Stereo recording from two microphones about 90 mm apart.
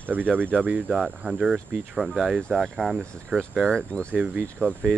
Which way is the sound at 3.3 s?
25° right (ahead or behind).